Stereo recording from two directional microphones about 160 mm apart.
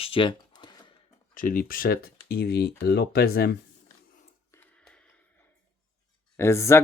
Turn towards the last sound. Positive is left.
turn(degrees=15)  # may be behind; listen again after turning